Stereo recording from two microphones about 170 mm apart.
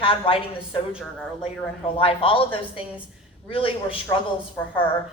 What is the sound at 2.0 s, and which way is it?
A woman's voice, 30° left (ahead or behind).